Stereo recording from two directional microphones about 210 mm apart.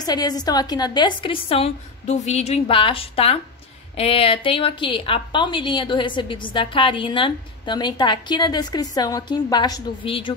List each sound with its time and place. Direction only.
0.0 s a woman's voice: 20° left (ahead or behind)